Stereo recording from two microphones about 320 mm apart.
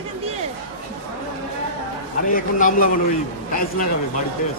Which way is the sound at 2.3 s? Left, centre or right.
Left.